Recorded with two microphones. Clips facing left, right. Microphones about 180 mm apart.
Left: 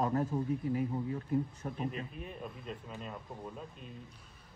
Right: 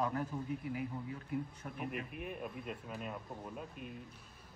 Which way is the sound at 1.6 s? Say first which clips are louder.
Left 6 dB; 40° left (ahead or behind).